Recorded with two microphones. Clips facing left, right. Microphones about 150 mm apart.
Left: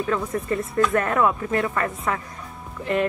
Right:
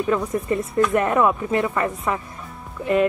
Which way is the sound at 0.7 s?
20° right (ahead or behind).